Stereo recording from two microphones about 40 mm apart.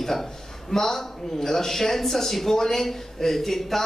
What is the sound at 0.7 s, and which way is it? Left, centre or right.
Speech, centre.